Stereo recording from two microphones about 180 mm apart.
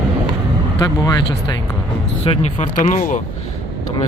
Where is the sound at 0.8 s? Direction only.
20° left (ahead or behind).